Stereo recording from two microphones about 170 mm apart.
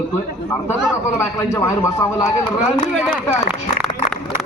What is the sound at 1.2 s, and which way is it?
A man's voice, 15° left (ahead or behind).